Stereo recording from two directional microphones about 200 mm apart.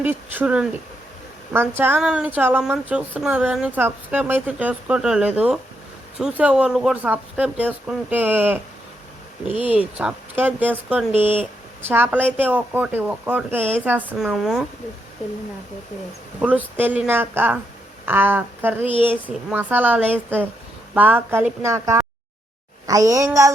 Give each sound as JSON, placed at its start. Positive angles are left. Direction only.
{"t": 0.0, "sound": "speech", "side_deg": -10}
{"t": 16.4, "sound": "speech", "side_deg": -10}
{"t": 19.1, "sound": "speech", "side_deg": 5}
{"t": 19.5, "sound": "speech", "side_deg": -10}